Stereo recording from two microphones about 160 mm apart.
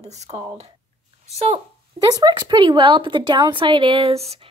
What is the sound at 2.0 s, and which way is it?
Speech, 25° right (ahead or behind).